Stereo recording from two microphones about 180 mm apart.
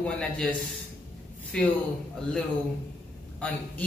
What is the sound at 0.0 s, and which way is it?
A woman's voice, 5° left (ahead or behind).